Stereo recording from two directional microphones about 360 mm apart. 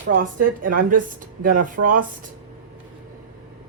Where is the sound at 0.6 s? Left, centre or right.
Right.